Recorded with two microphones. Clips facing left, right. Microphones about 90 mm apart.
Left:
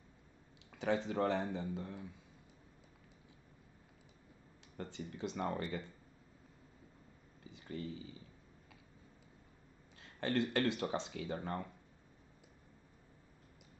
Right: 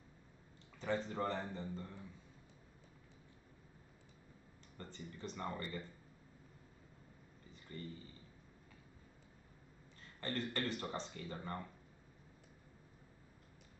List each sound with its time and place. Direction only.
0.7 s speech: 70° left (ahead or behind)
4.9 s speech: 75° left (ahead or behind)
7.4 s a sound: 90° left
9.9 s speech: 75° left (ahead or behind)